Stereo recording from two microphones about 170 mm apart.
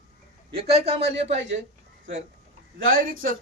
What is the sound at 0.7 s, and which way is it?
Speech, 40° right (ahead or behind).